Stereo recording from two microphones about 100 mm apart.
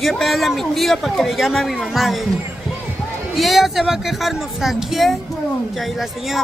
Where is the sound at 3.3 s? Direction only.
Centre (ahead or behind).